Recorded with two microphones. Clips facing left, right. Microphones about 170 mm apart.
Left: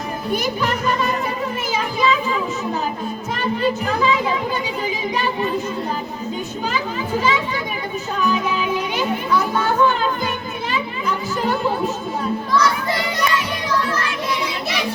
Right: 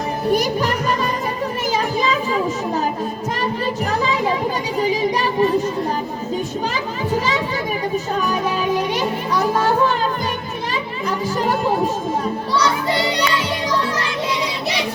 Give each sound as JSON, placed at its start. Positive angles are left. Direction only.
{"t": 0.3, "sound": "a child's voice", "side_deg": -40}
{"t": 2.0, "sound": "children playing", "side_deg": -40}
{"t": 3.4, "sound": "a child's voice", "side_deg": -40}
{"t": 4.8, "sound": "child singing", "side_deg": -40}
{"t": 7.2, "sound": "a child's voice", "side_deg": -40}
{"t": 8.2, "sound": "children playing", "side_deg": -45}